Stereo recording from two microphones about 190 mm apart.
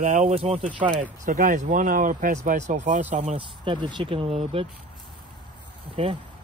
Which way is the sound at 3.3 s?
25° right (ahead or behind).